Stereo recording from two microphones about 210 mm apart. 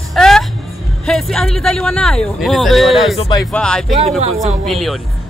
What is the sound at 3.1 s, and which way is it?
Speech, 25° left (ahead or behind).